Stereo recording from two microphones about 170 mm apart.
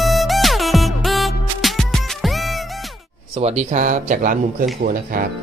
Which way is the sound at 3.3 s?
40° right (ahead or behind).